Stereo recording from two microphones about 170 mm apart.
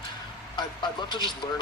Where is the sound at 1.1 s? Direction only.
25° left (ahead or behind).